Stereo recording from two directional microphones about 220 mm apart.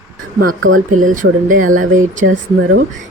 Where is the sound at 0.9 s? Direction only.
35° right (ahead or behind).